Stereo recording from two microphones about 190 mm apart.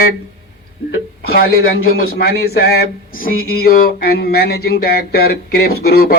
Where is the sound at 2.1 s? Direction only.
55° left (ahead or behind).